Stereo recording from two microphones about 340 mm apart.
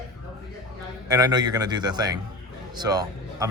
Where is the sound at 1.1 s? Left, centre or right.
Centre.